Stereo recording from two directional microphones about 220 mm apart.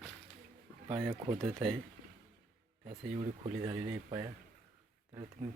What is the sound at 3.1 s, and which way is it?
Speech, 30° right (ahead or behind).